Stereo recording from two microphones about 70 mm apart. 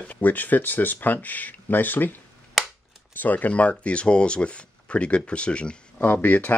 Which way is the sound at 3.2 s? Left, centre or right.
Left.